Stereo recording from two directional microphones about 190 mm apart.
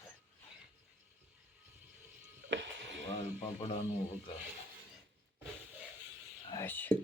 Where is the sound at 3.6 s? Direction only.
30° left (ahead or behind).